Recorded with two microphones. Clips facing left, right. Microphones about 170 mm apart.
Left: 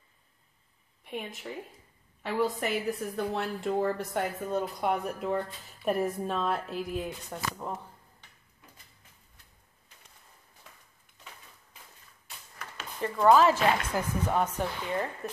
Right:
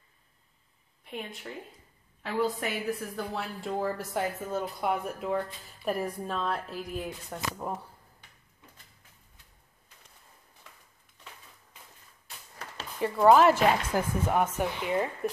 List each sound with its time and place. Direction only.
1.1 s a woman's voice: 5° left (ahead or behind)
13.0 s speech: 10° right (ahead or behind)